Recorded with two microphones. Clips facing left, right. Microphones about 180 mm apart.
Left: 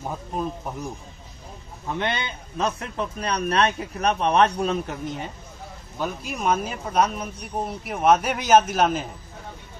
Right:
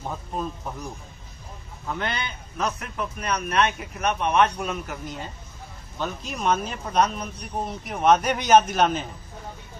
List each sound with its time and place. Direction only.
0.0 s speech: 10° left (ahead or behind)
1.9 s speech: 20° left (ahead or behind)
5.9 s speech: 5° left (ahead or behind)